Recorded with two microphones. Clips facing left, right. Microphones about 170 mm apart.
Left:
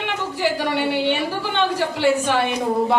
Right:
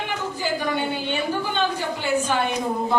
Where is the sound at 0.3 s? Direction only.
80° left.